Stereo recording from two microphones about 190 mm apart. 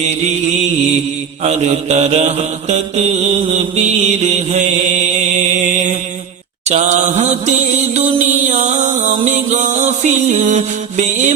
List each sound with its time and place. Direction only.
1.5 s mantra: 35° right (ahead or behind)
6.7 s mantra: 35° right (ahead or behind)
8.4 s music: 35° right (ahead or behind)